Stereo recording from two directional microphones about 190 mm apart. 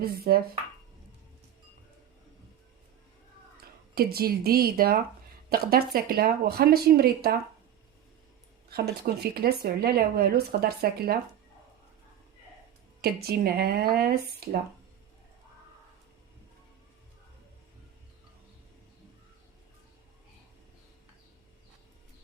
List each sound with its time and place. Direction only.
0.0 s speech: 55° right (ahead or behind)
3.9 s speech: 55° right (ahead or behind)
8.7 s speech: 55° right (ahead or behind)
13.0 s speech: 55° right (ahead or behind)